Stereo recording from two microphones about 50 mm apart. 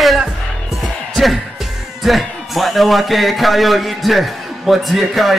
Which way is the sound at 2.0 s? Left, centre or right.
Centre.